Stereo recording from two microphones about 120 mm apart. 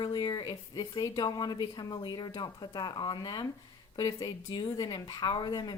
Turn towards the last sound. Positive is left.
turn(degrees=35)  # may be behind; listen again after turning